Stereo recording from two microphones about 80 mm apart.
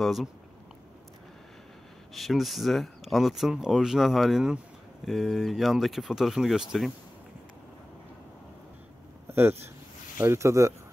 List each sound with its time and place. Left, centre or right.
0.0 s speech: centre
2.1 s speech: centre
9.3 s speech: right